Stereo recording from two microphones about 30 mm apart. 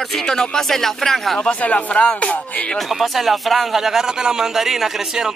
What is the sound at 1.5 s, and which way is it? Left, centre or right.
Speech, left.